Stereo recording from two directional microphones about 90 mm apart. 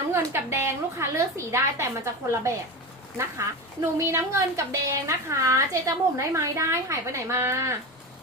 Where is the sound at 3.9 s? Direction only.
30° right (ahead or behind).